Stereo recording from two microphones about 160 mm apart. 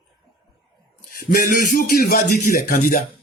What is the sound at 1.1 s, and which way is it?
Speech, 60° left (ahead or behind).